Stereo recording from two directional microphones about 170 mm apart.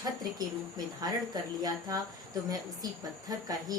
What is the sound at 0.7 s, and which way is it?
Speech, 25° right (ahead or behind).